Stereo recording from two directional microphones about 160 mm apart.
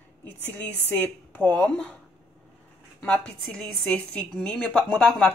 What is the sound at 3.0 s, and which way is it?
A woman's voice, 5° left (ahead or behind).